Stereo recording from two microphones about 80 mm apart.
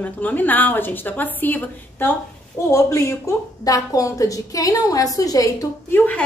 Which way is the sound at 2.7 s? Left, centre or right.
Left.